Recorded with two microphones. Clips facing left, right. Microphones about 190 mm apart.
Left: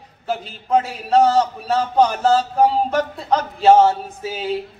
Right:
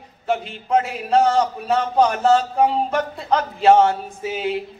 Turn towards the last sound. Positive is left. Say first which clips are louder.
# even
turn(degrees=0)  # may be behind; listen again after turning